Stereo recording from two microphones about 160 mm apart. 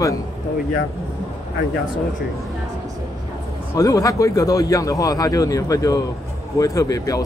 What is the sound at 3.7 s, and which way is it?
A man's voice, 20° left (ahead or behind).